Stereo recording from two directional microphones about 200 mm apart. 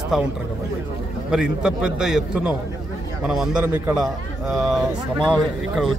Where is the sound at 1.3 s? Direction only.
5° right (ahead or behind).